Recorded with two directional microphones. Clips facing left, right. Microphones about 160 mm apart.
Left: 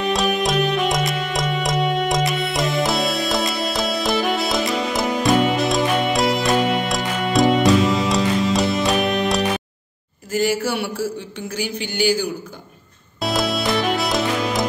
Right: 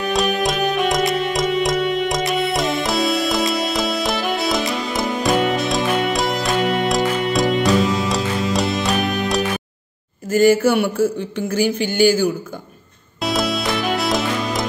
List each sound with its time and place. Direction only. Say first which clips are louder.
0.1 s music: right 2 dB; centre (ahead or behind)
10.3 s mantra: right 7 dB; 50° right (ahead or behind)
13.2 s music: even; centre (ahead or behind)